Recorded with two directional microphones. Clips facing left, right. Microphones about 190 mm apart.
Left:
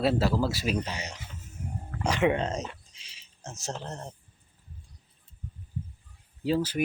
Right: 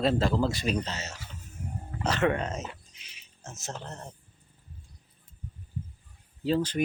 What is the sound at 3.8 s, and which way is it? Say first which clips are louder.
Speech: left 3 dB; 30° left (ahead or behind).